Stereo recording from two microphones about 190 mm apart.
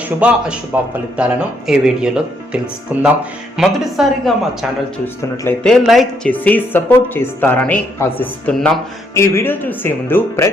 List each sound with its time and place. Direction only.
0.2 s speech: 5° right (ahead or behind)
5.6 s a woman's voice: centre (ahead or behind)
9.1 s a woman's voice: 15° left (ahead or behind)